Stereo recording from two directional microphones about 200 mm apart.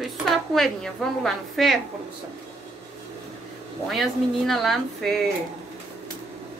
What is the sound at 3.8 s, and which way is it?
A woman's voice, centre (ahead or behind).